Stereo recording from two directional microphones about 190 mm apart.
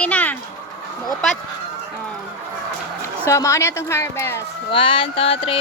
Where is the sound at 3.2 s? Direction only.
15° left (ahead or behind).